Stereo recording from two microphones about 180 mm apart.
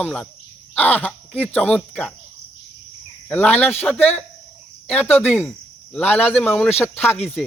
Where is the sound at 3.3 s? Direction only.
10° left (ahead or behind).